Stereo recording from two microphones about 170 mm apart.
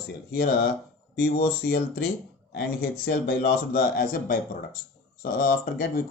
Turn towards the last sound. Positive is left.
turn(degrees=60)  # may be behind; listen again after turning